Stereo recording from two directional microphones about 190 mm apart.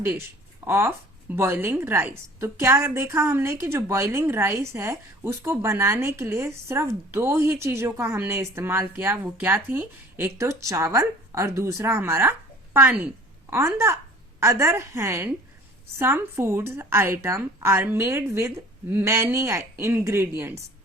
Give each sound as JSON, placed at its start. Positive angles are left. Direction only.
{"t": 0.0, "sound": "speech", "side_deg": -15}